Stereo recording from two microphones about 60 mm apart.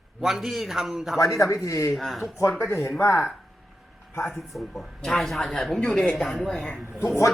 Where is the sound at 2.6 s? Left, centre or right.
Left.